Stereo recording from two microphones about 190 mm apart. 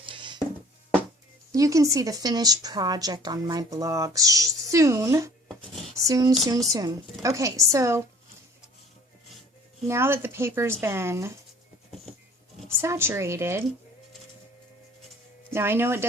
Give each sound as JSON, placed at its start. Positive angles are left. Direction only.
{"t": 0.0, "sound": "music", "side_deg": -25}
{"t": 1.5, "sound": "a woman's voice", "side_deg": -15}
{"t": 9.8, "sound": "a woman's voice", "side_deg": -15}
{"t": 12.6, "sound": "a woman's voice", "side_deg": -15}
{"t": 15.5, "sound": "a woman's voice", "side_deg": -10}